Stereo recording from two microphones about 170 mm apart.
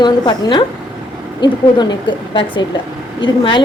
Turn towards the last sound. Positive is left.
turn(degrees=25)  # may be behind; listen again after turning